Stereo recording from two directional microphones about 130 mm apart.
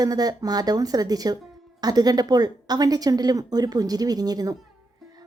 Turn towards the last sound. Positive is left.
turn(degrees=-30)  # may be behind; listen again after turning